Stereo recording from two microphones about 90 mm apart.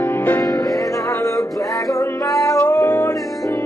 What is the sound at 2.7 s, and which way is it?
Music, 20° left (ahead or behind).